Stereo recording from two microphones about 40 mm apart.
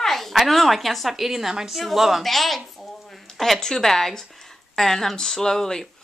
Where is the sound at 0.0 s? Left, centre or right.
Centre.